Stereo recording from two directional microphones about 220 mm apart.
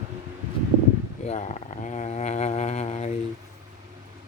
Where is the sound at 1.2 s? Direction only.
30° left (ahead or behind).